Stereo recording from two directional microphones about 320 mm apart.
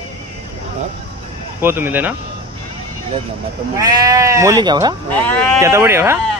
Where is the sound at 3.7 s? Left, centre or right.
Centre.